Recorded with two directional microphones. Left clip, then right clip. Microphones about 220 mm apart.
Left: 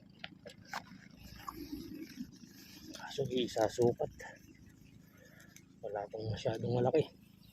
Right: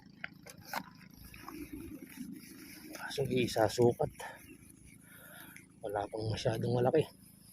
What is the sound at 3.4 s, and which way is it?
Speech, 15° right (ahead or behind).